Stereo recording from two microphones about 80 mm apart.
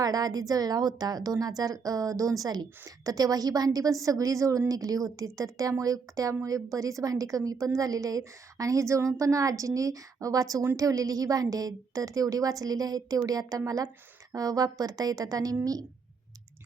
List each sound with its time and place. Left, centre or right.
0.0 s a woman's voice: right